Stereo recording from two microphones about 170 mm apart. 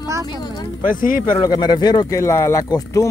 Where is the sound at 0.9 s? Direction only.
55° left (ahead or behind).